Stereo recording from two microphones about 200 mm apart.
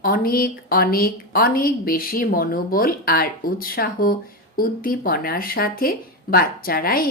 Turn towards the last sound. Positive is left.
turn(degrees=50)  # may be behind; listen again after turning